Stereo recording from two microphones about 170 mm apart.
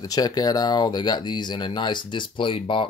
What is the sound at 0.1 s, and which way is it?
Speech, 25° left (ahead or behind).